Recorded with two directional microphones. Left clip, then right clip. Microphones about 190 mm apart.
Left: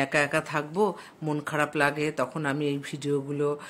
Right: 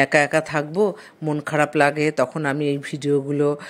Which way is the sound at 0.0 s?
30° right (ahead or behind).